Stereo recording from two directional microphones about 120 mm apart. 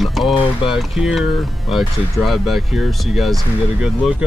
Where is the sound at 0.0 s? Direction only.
Centre (ahead or behind).